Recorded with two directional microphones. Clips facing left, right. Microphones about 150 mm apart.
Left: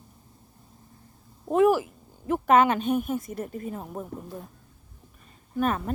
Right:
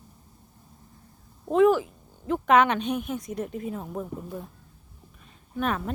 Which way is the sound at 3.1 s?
5° left (ahead or behind).